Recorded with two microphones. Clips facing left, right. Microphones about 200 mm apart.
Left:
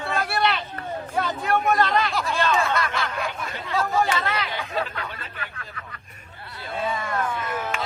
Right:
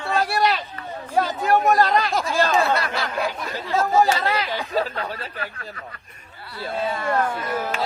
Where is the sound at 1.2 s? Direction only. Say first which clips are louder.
Right 5 dB; 40° right (ahead or behind).